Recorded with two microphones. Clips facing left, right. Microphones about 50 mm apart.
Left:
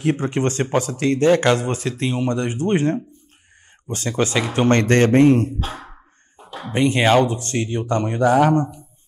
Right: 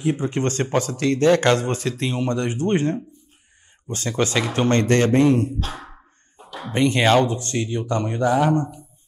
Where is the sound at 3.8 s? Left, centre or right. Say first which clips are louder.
Left 2 dB; left.